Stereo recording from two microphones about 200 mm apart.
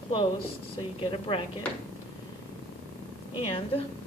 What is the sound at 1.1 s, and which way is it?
Speech, 25° left (ahead or behind).